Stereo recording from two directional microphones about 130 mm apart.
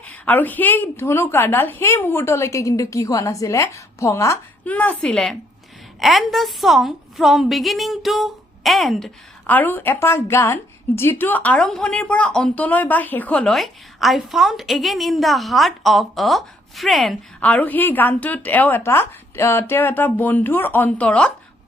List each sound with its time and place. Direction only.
0.0 s a woman's voice: 15° left (ahead or behind)
4.6 s a woman's voice: 10° left (ahead or behind)
9.5 s a woman's voice: 15° left (ahead or behind)